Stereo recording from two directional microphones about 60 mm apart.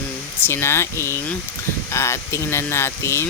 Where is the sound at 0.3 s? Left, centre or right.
Left.